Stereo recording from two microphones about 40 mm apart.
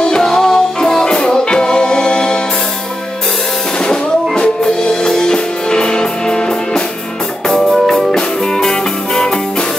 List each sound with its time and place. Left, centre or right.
0.2 s music: centre
3.8 s music: left
7.4 s music: centre